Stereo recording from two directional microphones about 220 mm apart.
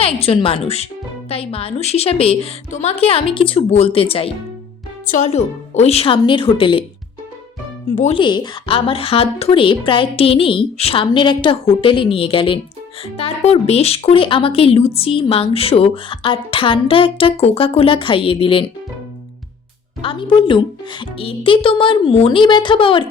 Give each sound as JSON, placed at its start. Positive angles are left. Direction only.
{"t": 0.0, "sound": "speech", "side_deg": 25}
{"t": 7.9, "sound": "speech", "side_deg": 25}
{"t": 20.0, "sound": "speech", "side_deg": 20}